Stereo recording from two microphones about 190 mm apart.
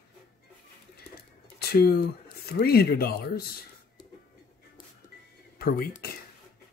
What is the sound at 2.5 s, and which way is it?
Speech, 55° left (ahead or behind).